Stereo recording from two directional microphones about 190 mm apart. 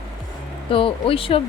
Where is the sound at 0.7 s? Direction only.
30° left (ahead or behind).